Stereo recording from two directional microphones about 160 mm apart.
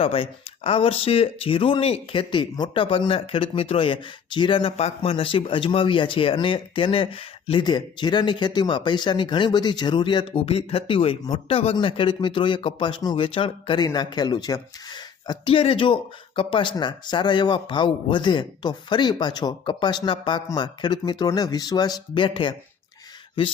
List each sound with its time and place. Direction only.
0.0 s speech: 35° left (ahead or behind)